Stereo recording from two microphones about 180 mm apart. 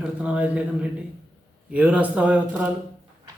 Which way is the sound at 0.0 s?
5° right (ahead or behind).